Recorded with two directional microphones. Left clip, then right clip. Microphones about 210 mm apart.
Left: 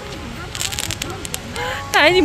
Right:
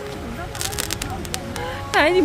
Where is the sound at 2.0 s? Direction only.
5° left (ahead or behind).